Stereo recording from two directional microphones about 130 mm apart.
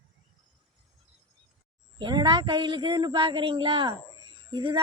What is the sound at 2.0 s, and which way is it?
A woman's voice, 35° right (ahead or behind).